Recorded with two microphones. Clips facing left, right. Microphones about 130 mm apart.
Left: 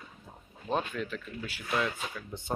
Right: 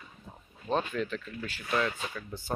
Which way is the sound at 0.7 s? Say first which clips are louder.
Right 2 dB; 10° left (ahead or behind).